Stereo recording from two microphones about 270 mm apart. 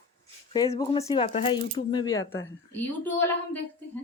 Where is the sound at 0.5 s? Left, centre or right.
Centre.